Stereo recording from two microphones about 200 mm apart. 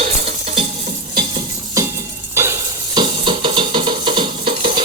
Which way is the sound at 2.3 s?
15° right (ahead or behind).